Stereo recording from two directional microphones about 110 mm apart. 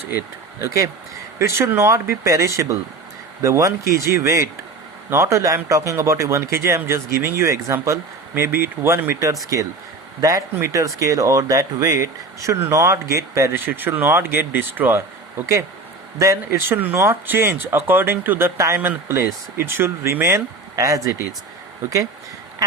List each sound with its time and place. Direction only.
0.6 s speech: 25° right (ahead or behind)
16.1 s speech: 25° right (ahead or behind)